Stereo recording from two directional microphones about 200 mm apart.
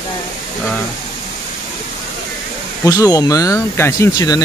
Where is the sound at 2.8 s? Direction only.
20° left (ahead or behind).